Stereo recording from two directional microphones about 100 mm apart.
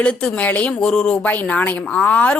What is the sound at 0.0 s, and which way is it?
A woman's voice, 10° left (ahead or behind).